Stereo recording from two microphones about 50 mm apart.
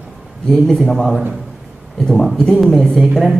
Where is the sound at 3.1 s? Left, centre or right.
Centre.